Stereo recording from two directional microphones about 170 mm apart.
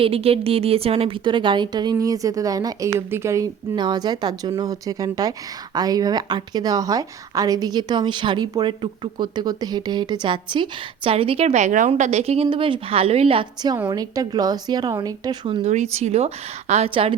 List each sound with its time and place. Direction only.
0.0 s a woman's voice: 35° right (ahead or behind)
15.4 s speech: 40° right (ahead or behind)